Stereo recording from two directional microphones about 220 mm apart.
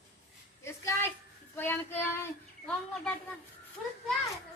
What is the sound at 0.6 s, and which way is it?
Speech, 10° left (ahead or behind).